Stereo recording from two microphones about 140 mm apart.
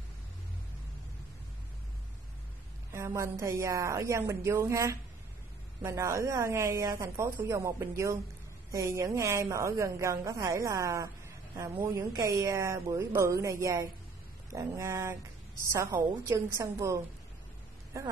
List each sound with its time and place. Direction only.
2.9 s speech: 20° right (ahead or behind)